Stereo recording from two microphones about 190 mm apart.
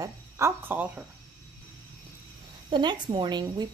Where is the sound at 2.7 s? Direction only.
25° right (ahead or behind).